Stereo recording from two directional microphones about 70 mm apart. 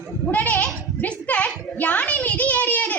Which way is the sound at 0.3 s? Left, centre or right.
Left.